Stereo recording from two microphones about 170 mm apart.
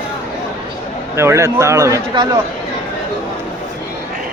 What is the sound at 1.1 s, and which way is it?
A man's voice, 15° right (ahead or behind).